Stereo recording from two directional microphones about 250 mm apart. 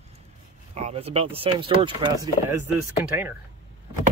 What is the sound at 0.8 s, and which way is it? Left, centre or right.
Speech, right.